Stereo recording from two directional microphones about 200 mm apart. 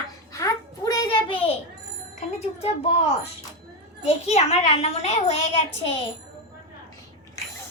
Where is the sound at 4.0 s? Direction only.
30° left (ahead or behind).